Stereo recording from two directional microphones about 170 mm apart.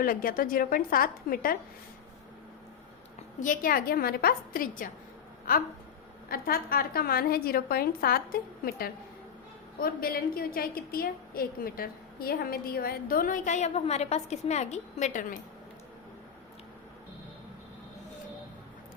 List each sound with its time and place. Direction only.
0.0 s a woman's voice: 55° left (ahead or behind)
3.4 s a woman's voice: 55° left (ahead or behind)
6.2 s a woman's voice: 60° left (ahead or behind)